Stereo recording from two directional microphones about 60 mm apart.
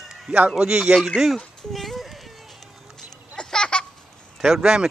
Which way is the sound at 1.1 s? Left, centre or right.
Centre.